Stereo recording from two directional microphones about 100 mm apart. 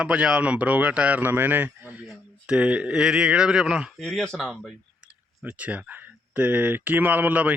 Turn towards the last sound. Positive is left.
turn(degrees=-15)  # may be behind; listen again after turning